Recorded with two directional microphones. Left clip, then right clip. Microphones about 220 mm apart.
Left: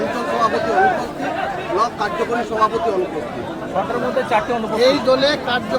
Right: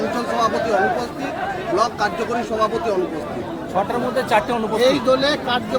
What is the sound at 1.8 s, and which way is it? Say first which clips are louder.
Speech: even; 50° right (ahead or behind).